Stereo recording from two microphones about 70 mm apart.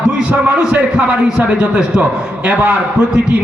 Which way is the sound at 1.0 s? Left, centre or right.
Centre.